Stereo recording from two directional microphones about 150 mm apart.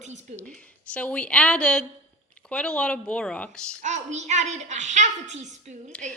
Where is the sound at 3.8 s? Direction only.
50° right (ahead or behind).